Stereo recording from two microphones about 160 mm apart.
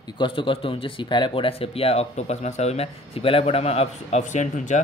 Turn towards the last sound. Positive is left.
turn(degrees=50)  # may be behind; listen again after turning